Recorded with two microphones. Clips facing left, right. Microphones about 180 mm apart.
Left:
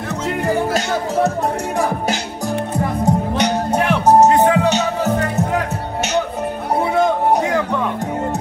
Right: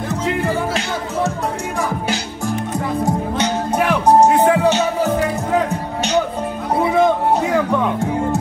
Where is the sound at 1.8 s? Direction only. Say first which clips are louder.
Left 1 dB; 35° left (ahead or behind).